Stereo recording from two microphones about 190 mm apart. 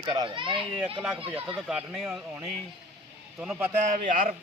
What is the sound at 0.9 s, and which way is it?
Speech, 5° right (ahead or behind).